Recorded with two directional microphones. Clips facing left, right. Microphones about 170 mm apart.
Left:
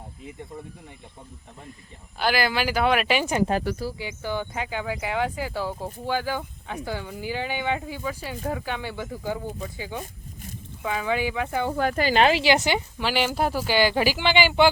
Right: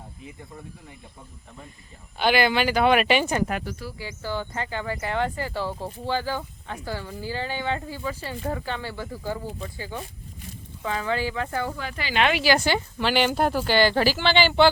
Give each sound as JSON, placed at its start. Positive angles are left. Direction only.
{"t": 2.1, "sound": "speech", "side_deg": 0}
{"t": 3.5, "sound": "speech", "side_deg": 30}
{"t": 3.9, "sound": "speech", "side_deg": 20}
{"t": 11.8, "sound": "speech", "side_deg": 50}